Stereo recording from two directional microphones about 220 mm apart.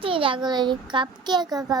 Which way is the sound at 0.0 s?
25° right (ahead or behind).